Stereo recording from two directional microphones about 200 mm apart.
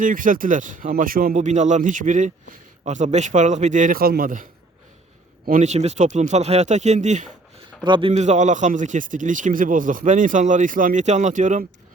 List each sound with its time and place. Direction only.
0.0 s speech: 45° right (ahead or behind)
5.5 s speech: 35° right (ahead or behind)
7.9 s a man's voice: 25° right (ahead or behind)
8.1 s speech: 35° right (ahead or behind)